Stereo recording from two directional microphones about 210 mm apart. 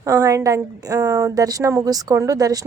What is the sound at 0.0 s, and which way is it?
A woman's voice, 15° right (ahead or behind).